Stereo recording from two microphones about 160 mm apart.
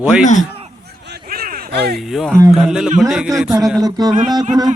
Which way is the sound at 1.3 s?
65° right (ahead or behind).